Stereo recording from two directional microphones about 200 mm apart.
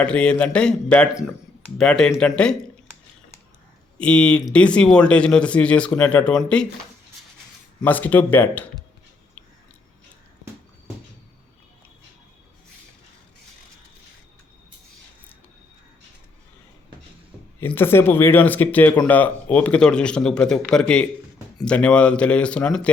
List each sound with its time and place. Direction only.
0.0 s speech: 5° left (ahead or behind)
3.9 s speech: 5° left (ahead or behind)
7.8 s speech: 10° left (ahead or behind)
17.6 s speech: 10° left (ahead or behind)